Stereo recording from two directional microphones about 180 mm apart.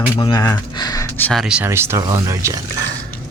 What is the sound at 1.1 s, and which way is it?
Speech, 5° left (ahead or behind).